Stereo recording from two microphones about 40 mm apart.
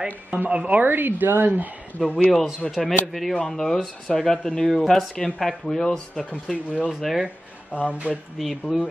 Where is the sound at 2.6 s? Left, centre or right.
Centre.